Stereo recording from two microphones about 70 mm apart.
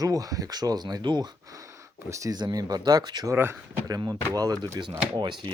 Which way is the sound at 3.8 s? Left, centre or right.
Right.